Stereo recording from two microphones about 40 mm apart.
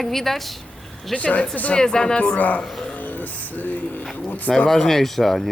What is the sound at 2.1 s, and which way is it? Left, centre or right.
Speech, left.